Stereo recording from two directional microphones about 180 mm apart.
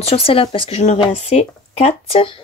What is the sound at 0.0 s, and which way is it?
Speech, 35° left (ahead or behind).